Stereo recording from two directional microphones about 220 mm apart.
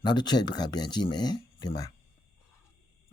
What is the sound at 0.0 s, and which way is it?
Speech, 20° left (ahead or behind).